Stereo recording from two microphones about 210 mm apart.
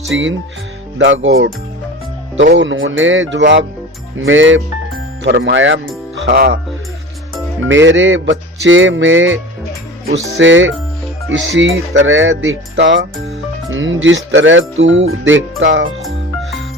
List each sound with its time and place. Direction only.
0.1 s speech: 60° right (ahead or behind)
5.2 s speech: 55° right (ahead or behind)
6.2 s speech: 50° right (ahead or behind)
7.7 s speech: 60° right (ahead or behind)
16.0 s music: centre (ahead or behind)